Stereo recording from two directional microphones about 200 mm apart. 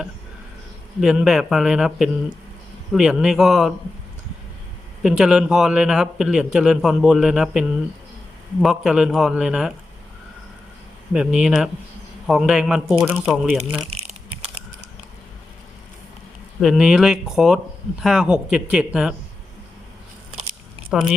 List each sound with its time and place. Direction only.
1.0 s a man's voice: centre (ahead or behind)
5.0 s a man's voice: 5° right (ahead or behind)
8.6 s a man's voice: centre (ahead or behind)
11.1 s a man's voice: 5° right (ahead or behind)
13.8 s a sound: 90° right
16.6 s a man's voice: 5° right (ahead or behind)
20.9 s a man's voice: 5° right (ahead or behind)